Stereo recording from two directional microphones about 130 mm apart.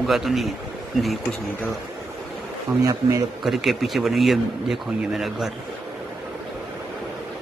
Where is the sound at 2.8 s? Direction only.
25° right (ahead or behind).